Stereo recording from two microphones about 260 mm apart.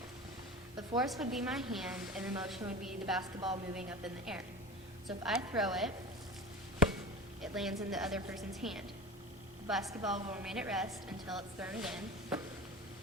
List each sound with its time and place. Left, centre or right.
0.8 s a woman's voice: centre
7.5 s a woman's voice: centre